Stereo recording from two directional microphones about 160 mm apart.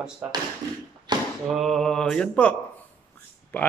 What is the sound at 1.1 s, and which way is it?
Chop, 25° right (ahead or behind).